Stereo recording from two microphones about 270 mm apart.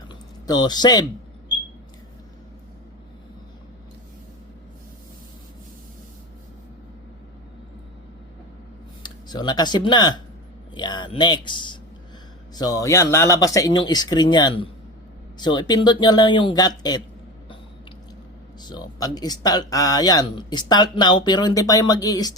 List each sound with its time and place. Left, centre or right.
0.1 s a sound: centre
9.0 s speech: centre
18.6 s speech: centre